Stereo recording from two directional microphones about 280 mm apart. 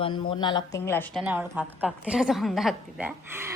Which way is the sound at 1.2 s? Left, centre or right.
Centre.